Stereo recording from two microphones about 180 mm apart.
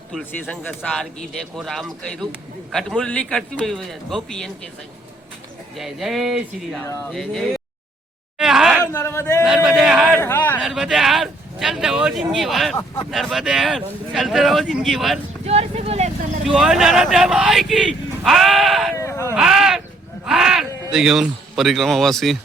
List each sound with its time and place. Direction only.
0.1 s speech: 5° left (ahead or behind)
5.7 s speech: centre (ahead or behind)
8.4 s a sound: centre (ahead or behind)
8.8 s a man's voice: 10° left (ahead or behind)
9.4 s speech: 5° right (ahead or behind)
10.2 s a sound: 10° left (ahead or behind)
10.6 s speech: centre (ahead or behind)
15.4 s a sound: 35° right (ahead or behind)
16.5 s speech: 5° right (ahead or behind)
18.9 s sheep: 15° left (ahead or behind)
19.3 s a sound: 5° right (ahead or behind)
20.2 s speech: 5° right (ahead or behind)